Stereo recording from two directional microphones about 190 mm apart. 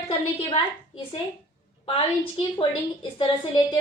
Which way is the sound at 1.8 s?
25° left (ahead or behind).